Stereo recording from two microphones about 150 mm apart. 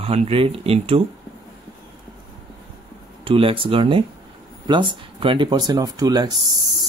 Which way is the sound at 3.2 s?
35° right (ahead or behind).